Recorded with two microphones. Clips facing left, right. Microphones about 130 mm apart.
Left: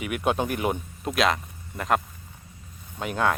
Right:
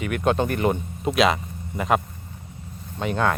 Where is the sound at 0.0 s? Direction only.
5° left (ahead or behind).